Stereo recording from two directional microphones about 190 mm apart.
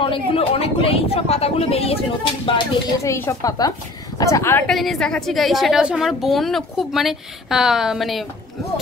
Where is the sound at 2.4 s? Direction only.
20° left (ahead or behind).